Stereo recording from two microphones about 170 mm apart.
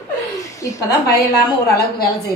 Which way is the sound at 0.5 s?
20° left (ahead or behind).